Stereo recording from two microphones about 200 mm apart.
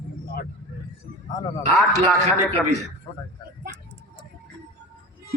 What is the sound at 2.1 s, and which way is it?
Speech, 35° right (ahead or behind).